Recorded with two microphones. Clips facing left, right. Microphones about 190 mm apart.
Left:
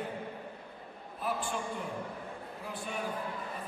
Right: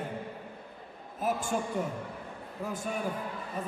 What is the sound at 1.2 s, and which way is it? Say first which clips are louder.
Speech: right 4 dB; 45° right (ahead or behind).